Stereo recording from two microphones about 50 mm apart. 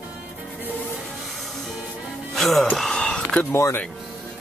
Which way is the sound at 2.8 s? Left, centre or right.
Centre.